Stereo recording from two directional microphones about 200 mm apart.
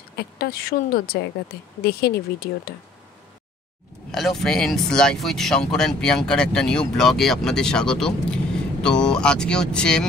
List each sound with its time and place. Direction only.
0.2 s speech: 50° left (ahead or behind)
4.1 s speech: centre (ahead or behind)